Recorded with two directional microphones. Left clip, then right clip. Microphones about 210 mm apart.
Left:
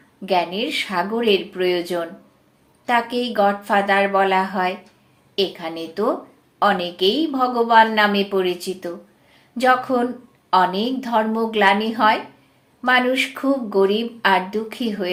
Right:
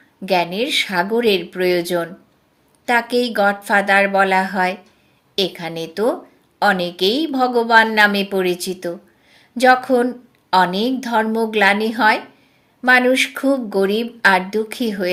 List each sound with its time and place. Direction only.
0.3 s speech: 45° right (ahead or behind)